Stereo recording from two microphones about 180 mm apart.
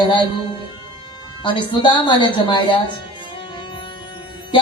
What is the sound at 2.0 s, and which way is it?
Music, 25° left (ahead or behind).